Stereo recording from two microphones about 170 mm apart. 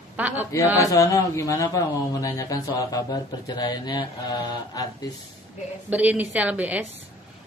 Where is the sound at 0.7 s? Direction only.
20° left (ahead or behind).